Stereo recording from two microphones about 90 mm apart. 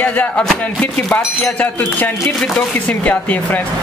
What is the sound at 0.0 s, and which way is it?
Speech, 15° left (ahead or behind).